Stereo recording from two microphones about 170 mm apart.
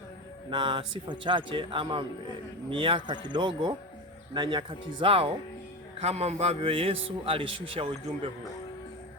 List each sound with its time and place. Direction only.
0.5 s a man's voice: 30° right (ahead or behind)